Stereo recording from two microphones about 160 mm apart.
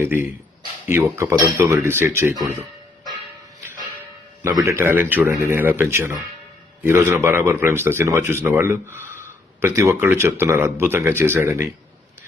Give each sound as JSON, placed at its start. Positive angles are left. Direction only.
{"t": 0.0, "sound": "speech", "side_deg": -15}
{"t": 4.4, "sound": "speech", "side_deg": -20}